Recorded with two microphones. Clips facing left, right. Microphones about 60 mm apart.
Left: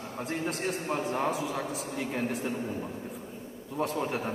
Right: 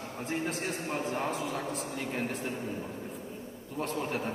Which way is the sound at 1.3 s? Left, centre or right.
Centre.